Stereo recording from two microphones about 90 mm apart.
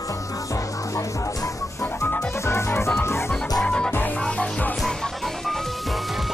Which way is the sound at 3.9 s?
20° left (ahead or behind).